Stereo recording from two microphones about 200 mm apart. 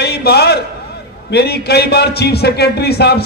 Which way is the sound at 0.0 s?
55° left (ahead or behind).